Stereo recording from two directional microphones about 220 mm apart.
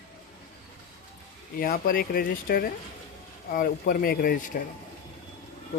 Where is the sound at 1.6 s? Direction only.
40° left (ahead or behind).